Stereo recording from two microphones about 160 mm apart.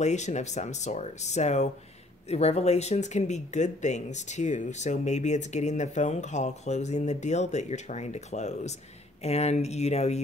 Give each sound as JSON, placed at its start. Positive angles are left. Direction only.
{"t": 0.0, "sound": "speech", "side_deg": 45}